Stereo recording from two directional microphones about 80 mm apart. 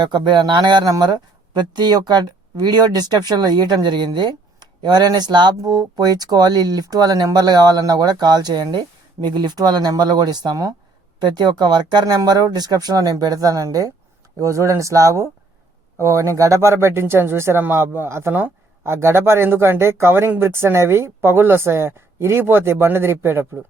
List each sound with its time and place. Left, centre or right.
0.0 s speech: right
0.9 s speech: right